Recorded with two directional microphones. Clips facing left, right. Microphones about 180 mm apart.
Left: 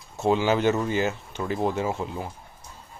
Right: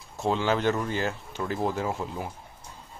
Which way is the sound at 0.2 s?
5° left (ahead or behind).